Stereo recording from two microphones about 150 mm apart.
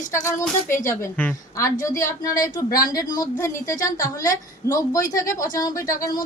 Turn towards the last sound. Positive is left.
turn(degrees=25)  # may be behind; listen again after turning